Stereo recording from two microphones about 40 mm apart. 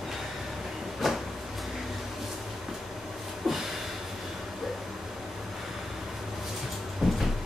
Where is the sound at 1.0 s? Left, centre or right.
Centre.